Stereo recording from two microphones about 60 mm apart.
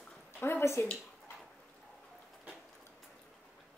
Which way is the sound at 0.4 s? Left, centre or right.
Left.